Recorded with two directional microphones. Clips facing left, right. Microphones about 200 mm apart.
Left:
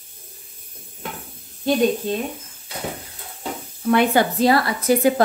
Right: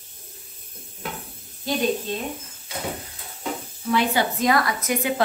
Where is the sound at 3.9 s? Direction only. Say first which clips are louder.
Left 5 dB; 55° left (ahead or behind).